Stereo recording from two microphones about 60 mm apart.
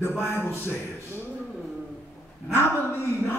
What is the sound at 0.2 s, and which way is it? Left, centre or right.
Speech, left.